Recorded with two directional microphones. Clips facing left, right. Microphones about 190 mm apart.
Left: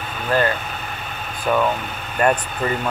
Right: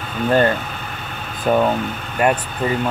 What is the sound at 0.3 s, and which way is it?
Speech, 25° right (ahead or behind).